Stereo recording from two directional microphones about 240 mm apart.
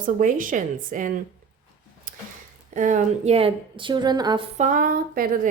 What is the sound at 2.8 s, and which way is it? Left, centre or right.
Speech, right.